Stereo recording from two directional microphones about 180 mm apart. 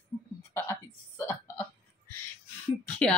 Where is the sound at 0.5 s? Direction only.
10° left (ahead or behind).